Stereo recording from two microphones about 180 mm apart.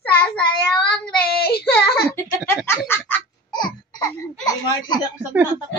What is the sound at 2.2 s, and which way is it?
Speech, 15° left (ahead or behind).